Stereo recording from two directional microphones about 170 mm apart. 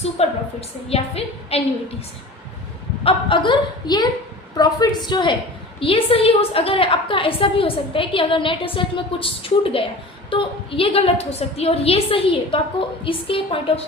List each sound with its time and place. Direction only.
0.2 s a sound: 35° left (ahead or behind)
0.9 s a woman's voice: 35° left (ahead or behind)
3.0 s a woman's voice: 30° left (ahead or behind)